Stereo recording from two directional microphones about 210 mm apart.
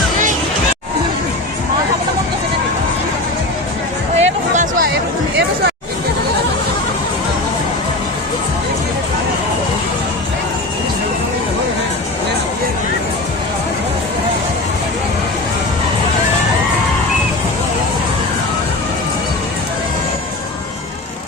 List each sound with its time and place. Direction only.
4.2 s music: 35° right (ahead or behind)